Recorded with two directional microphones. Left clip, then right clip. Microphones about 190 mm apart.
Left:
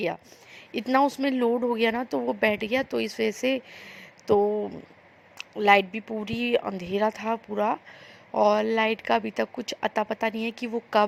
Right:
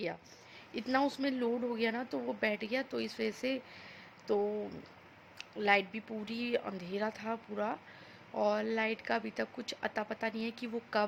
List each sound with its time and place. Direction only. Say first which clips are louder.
0.7 s speech: left 10 dB; 40° left (ahead or behind)